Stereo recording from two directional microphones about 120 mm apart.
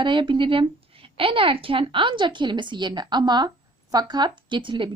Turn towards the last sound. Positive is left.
turn(degrees=-45)  # may be behind; listen again after turning